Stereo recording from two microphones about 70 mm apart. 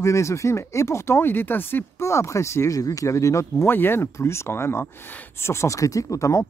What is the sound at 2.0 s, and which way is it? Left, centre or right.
Speech, left.